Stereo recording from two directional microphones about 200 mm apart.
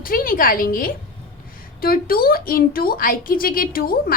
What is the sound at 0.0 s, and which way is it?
A woman's voice, 45° left (ahead or behind).